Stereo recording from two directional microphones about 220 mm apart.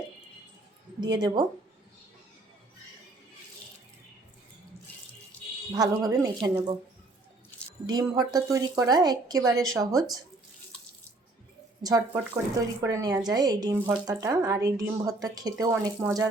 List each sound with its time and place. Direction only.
1.0 s speech: 20° right (ahead or behind)
5.7 s speech: 15° right (ahead or behind)
7.9 s speech: 20° right (ahead or behind)
11.8 s speech: 15° right (ahead or behind)